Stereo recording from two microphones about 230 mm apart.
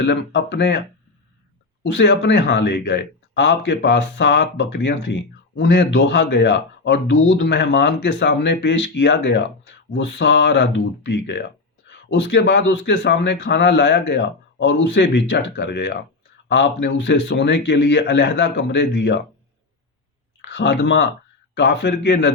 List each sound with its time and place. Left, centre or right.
0.0 s speech: left
1.9 s speech: left
20.5 s speech: left